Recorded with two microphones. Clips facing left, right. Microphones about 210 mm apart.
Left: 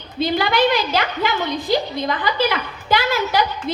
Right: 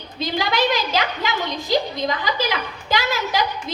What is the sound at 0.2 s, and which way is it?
A woman's voice, 55° left (ahead or behind).